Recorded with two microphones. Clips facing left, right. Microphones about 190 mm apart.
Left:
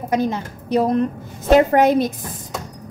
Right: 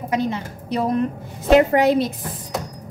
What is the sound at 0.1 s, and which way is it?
A woman's voice, 45° left (ahead or behind).